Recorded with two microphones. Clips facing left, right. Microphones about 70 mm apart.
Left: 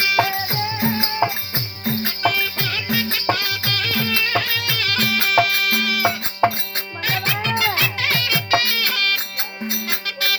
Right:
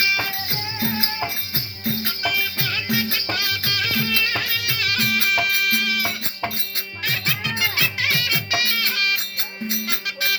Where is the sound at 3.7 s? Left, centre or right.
Centre.